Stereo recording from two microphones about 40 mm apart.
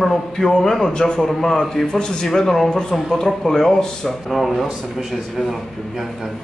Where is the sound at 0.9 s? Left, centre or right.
Centre.